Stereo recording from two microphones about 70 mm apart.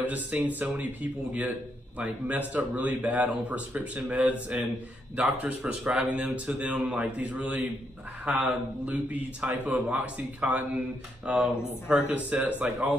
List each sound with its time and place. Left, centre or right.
0.0 s speech: right
2.0 s speech: right